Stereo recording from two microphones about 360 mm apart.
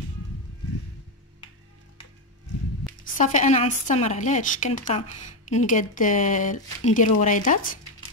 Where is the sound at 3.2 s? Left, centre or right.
Centre.